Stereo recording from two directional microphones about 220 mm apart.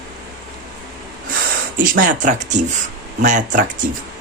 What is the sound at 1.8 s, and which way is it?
Speech, 35° right (ahead or behind).